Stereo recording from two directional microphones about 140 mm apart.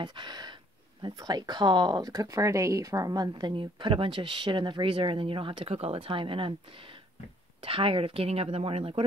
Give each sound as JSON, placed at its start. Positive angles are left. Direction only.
{"t": 0.0, "sound": "speech", "side_deg": -35}